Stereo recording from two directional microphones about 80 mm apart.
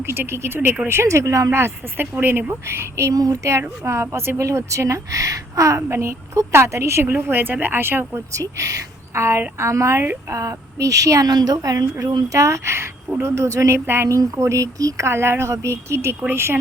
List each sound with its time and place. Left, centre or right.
0.0 s a woman's voice: right
2.1 s a woman's voice: centre
8.4 s a woman's voice: right
10.3 s a woman's voice: right
14.1 s a woman's voice: right